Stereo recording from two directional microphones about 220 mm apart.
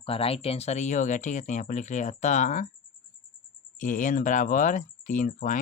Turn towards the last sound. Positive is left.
turn(degrees=35)  # may be behind; listen again after turning